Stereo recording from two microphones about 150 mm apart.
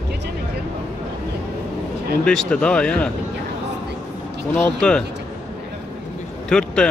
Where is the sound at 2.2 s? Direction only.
5° left (ahead or behind).